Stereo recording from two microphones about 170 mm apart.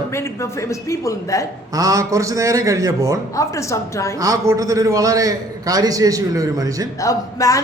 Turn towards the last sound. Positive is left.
turn(degrees=20)  # may be behind; listen again after turning